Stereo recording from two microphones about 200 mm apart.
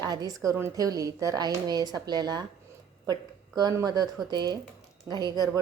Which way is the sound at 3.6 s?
20° right (ahead or behind).